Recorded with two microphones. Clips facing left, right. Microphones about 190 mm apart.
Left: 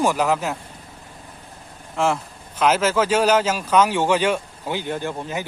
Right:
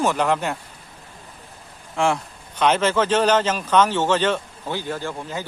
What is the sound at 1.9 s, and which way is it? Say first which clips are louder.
Speech: even; centre (ahead or behind).